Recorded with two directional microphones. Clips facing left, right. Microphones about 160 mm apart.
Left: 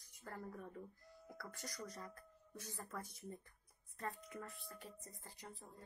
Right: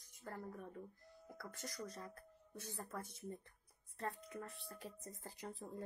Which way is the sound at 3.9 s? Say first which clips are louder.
Right 2 dB; 30° right (ahead or behind).